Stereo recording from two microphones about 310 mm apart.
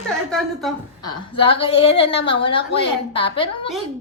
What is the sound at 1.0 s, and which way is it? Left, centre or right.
A woman's voice, centre.